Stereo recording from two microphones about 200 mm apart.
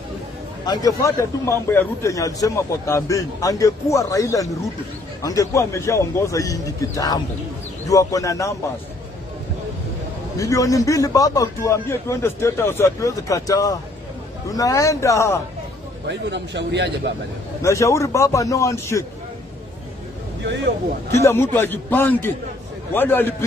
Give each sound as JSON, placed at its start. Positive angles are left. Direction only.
{"t": 0.7, "sound": "speech", "side_deg": 20}
{"t": 10.3, "sound": "speech", "side_deg": 15}
{"t": 16.1, "sound": "a man's voice", "side_deg": -60}
{"t": 17.6, "sound": "speech", "side_deg": 15}
{"t": 21.1, "sound": "speech", "side_deg": 15}